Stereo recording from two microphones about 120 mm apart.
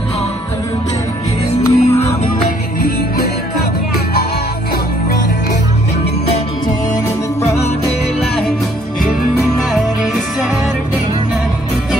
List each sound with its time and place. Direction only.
1.7 s music: 60° left (ahead or behind)